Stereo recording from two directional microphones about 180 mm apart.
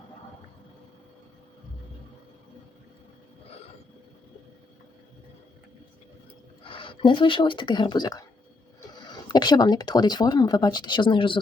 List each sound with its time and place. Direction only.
6.7 s speech: 30° left (ahead or behind)